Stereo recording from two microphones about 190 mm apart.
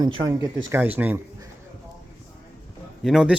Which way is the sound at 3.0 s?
5° right (ahead or behind).